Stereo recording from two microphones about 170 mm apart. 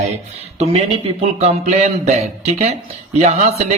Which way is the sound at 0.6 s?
40° right (ahead or behind).